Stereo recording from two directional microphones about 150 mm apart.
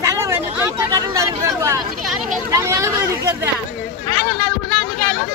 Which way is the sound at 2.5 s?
20° right (ahead or behind).